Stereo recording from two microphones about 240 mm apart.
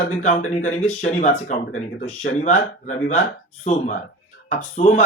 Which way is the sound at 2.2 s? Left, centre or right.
Left.